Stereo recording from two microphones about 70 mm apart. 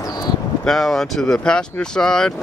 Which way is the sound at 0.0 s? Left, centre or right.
Left.